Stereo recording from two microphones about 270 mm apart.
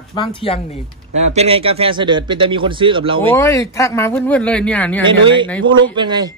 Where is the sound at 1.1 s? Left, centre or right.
Right.